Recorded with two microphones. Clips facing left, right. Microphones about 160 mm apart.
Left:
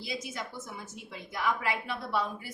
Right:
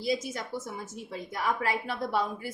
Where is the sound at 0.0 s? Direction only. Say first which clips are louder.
Right 7 dB; 45° right (ahead or behind).